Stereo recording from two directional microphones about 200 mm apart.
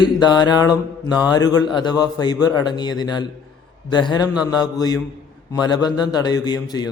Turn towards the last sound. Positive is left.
turn(degrees=20)  # may be behind; listen again after turning